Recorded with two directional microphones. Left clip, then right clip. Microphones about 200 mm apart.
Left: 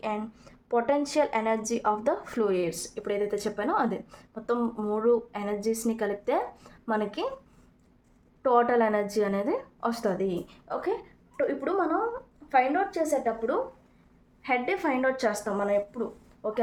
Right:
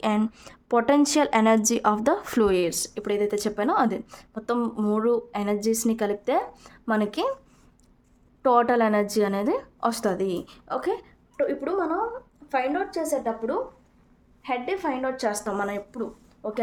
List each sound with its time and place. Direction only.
0.0 s a woman's voice: 50° right (ahead or behind)
8.4 s a woman's voice: 35° right (ahead or behind)
11.3 s a woman's voice: 20° right (ahead or behind)
14.4 s a woman's voice: centre (ahead or behind)
15.3 s a woman's voice: 25° right (ahead or behind)
15.5 s a woman's voice: 35° right (ahead or behind)
16.4 s a woman's voice: 15° right (ahead or behind)